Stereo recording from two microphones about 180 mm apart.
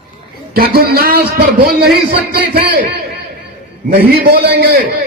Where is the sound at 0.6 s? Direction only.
60° right (ahead or behind).